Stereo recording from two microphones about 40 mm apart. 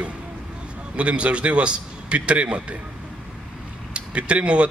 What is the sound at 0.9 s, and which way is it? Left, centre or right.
Speech, right.